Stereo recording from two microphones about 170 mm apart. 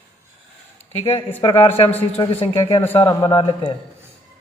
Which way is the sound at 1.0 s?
35° left (ahead or behind).